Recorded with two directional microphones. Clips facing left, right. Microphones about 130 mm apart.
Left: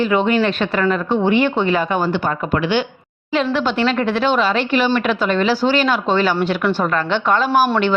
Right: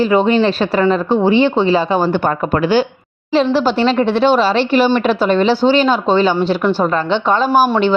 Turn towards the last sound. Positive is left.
turn(degrees=-35)  # may be behind; listen again after turning